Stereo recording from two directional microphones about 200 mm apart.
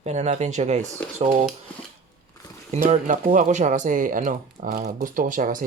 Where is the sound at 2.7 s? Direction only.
35° right (ahead or behind).